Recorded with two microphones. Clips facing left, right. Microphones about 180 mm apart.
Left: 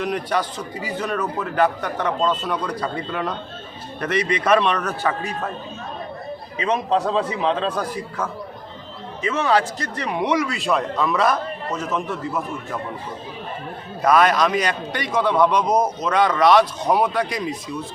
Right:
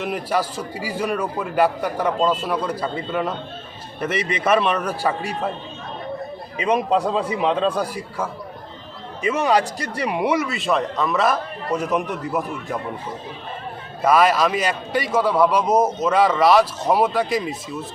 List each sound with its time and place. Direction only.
0.0 s a man's voice: 5° right (ahead or behind)
6.6 s a man's voice: 10° right (ahead or behind)
11.7 s a man's voice: 15° right (ahead or behind)
14.0 s a man's voice: 5° right (ahead or behind)